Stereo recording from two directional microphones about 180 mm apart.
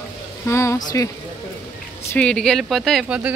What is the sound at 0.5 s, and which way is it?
Speech, 15° left (ahead or behind).